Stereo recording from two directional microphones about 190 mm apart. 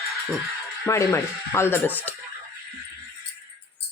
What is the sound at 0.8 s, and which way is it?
Speech, 15° left (ahead or behind).